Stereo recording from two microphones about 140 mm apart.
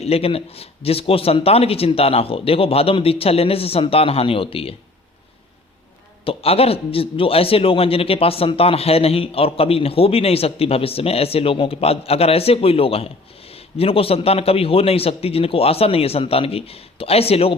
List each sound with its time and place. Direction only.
0.0 s a man's voice: 45° left (ahead or behind)
6.2 s a man's voice: 45° left (ahead or behind)